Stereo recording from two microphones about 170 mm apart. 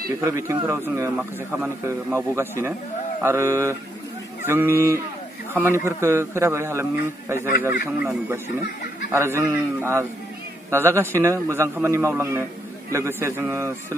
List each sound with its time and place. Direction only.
0.2 s a man's voice: 20° right (ahead or behind)
9.1 s a man's voice: 15° right (ahead or behind)